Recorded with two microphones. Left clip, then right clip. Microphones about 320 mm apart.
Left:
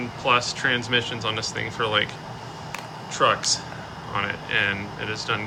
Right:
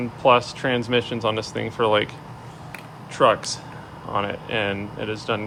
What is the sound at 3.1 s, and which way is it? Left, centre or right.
Speech, centre.